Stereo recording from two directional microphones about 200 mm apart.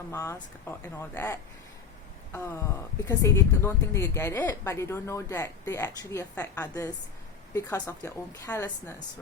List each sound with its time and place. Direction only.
0.1 s a woman's voice: 15° left (ahead or behind)